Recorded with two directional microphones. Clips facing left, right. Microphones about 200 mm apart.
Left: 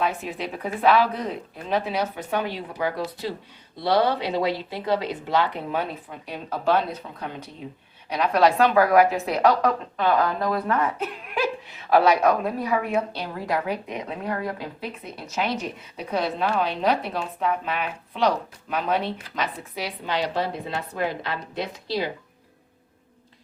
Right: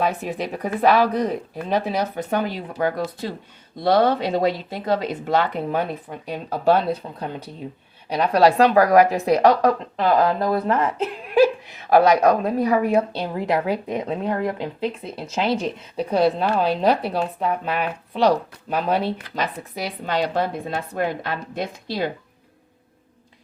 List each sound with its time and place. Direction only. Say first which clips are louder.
0.0 s a woman's voice: right 3 dB; 40° right (ahead or behind)
6.5 s a woman's voice: right 4 dB; 35° right (ahead or behind)
11.9 s a woman's voice: right 3 dB; 45° right (ahead or behind)
13.1 s a woman's voice: right 5 dB; 25° right (ahead or behind); by 22.1 s 50° right (ahead or behind)